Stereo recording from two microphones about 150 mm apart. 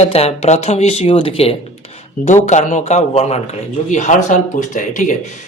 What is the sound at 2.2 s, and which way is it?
Speech, 50° left (ahead or behind).